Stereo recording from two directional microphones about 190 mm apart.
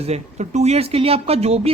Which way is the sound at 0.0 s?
35° right (ahead or behind).